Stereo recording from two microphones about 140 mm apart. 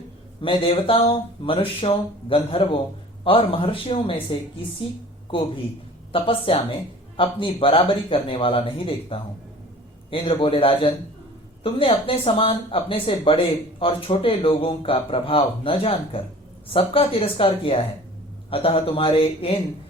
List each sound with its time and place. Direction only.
0.4 s speech: 40° left (ahead or behind)
6.1 s speech: 40° left (ahead or behind)